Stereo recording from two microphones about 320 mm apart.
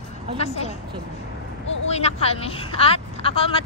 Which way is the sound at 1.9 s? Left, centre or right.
Centre.